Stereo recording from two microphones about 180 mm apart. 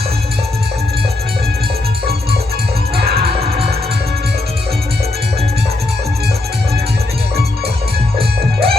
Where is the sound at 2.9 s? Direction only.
60° right (ahead or behind).